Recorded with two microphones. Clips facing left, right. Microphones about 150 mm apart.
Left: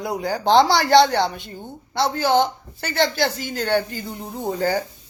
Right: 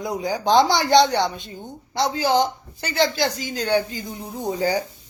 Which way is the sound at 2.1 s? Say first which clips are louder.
Left 1 dB; 55° left (ahead or behind).